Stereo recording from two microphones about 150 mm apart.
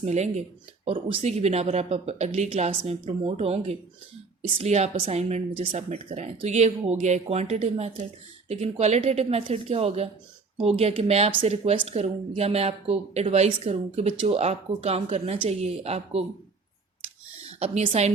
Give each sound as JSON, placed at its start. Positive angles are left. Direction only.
{"t": 0.0, "sound": "speech", "side_deg": -50}
{"t": 0.9, "sound": "speech", "side_deg": -35}
{"t": 17.4, "sound": "a woman's voice", "side_deg": -45}